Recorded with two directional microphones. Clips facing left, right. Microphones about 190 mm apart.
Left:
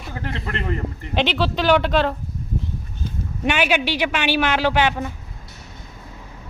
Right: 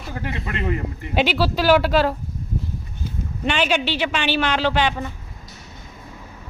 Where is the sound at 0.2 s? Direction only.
15° right (ahead or behind).